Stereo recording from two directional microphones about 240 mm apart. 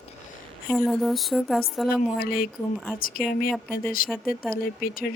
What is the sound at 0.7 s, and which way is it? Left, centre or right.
Speech, centre.